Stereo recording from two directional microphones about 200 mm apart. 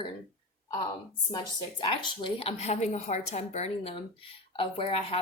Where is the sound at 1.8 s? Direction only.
25° left (ahead or behind).